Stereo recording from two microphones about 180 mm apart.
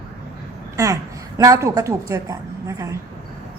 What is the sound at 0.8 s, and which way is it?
A woman's voice, 20° right (ahead or behind).